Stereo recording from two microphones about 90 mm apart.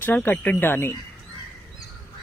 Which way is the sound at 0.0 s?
20° left (ahead or behind).